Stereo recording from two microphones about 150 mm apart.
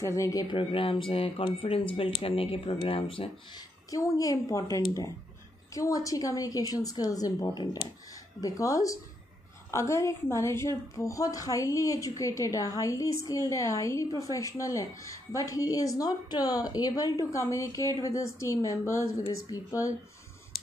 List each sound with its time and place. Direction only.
0.0 s a woman's voice: 20° left (ahead or behind)
0.6 s speech: 35° left (ahead or behind)
3.9 s a woman's voice: 25° left (ahead or behind)
5.7 s a woman's voice: 20° left (ahead or behind)